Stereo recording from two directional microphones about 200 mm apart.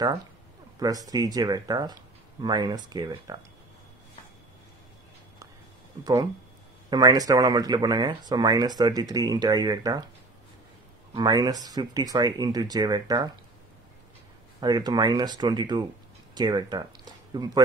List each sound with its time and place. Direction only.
0.7 s speech: 20° right (ahead or behind)
6.9 s speech: 20° right (ahead or behind)
11.1 s speech: 20° right (ahead or behind)
14.6 s speech: 20° right (ahead or behind)